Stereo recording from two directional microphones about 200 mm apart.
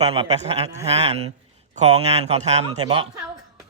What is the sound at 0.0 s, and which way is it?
Speech, 30° right (ahead or behind).